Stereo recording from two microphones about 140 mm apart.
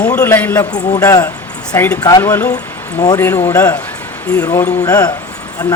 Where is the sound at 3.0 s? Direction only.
25° left (ahead or behind).